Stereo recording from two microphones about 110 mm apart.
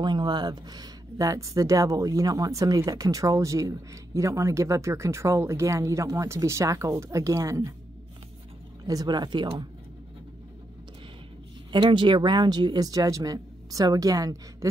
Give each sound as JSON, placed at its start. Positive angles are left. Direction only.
{"t": 0.0, "sound": "speech", "side_deg": -40}
{"t": 8.8, "sound": "speech", "side_deg": -35}
{"t": 11.7, "sound": "speech", "side_deg": -45}